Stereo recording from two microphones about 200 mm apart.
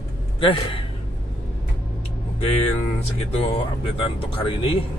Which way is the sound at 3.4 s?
30° left (ahead or behind).